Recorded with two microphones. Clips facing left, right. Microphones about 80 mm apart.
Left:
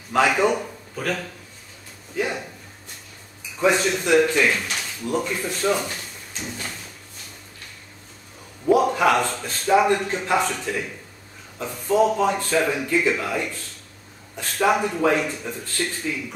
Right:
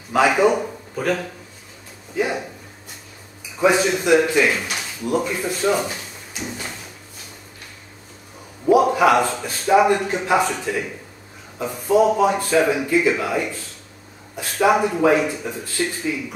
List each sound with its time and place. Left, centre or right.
0.1 s a man's voice: centre
2.1 s a sound: centre
3.5 s a man's voice: centre
8.6 s a man's voice: centre